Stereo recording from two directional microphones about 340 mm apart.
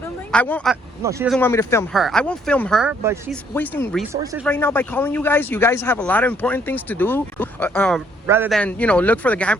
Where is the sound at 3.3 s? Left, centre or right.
Centre.